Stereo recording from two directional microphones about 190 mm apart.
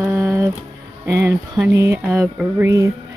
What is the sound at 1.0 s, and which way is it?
Speech, 15° right (ahead or behind).